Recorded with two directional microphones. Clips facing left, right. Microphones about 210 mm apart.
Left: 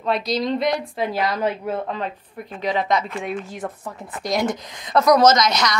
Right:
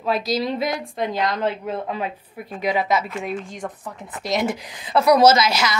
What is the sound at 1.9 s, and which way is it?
Speech, 10° right (ahead or behind).